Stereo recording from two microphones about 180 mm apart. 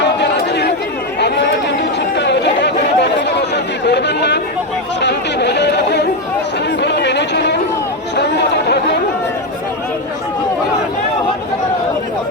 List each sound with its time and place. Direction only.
0.2 s chatter: 70° left (ahead or behind)
6.8 s a sound: 70° left (ahead or behind)
8.1 s chatter: 70° left (ahead or behind)